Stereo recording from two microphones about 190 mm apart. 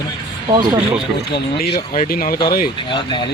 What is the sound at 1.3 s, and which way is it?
Speech, 55° left (ahead or behind).